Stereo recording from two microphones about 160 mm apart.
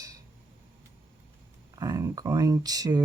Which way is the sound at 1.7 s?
20° right (ahead or behind).